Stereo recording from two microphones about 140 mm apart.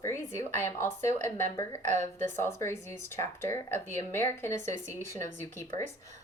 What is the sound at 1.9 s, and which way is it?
Speech, 60° right (ahead or behind).